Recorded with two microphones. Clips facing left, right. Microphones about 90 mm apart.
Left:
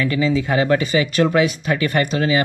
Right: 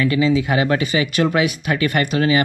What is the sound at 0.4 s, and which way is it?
Speech, 10° right (ahead or behind).